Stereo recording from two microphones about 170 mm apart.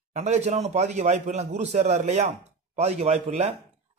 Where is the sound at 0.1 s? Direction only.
40° right (ahead or behind).